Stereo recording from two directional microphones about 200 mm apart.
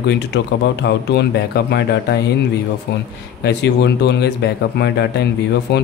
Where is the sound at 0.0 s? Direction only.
60° left (ahead or behind).